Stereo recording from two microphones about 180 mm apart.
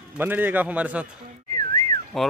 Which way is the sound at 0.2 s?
10° right (ahead or behind).